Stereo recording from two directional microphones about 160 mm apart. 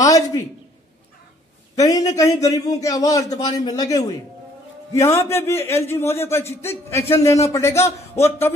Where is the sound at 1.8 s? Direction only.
20° left (ahead or behind).